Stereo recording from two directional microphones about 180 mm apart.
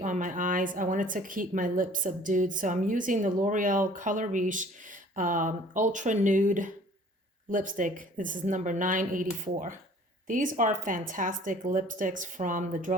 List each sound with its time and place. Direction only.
0.0 s speech: 45° right (ahead or behind)